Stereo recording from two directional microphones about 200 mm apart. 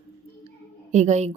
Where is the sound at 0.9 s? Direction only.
35° right (ahead or behind).